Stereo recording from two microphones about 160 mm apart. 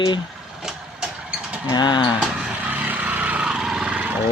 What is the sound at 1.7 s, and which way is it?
Speech, 30° left (ahead or behind).